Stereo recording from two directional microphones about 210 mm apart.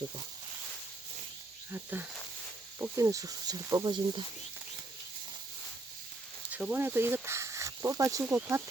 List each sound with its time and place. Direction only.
1.7 s speech: 10° right (ahead or behind)
6.5 s speech: 5° right (ahead or behind)